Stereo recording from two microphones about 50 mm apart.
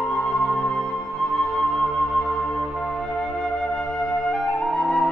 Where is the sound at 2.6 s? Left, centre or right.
Centre.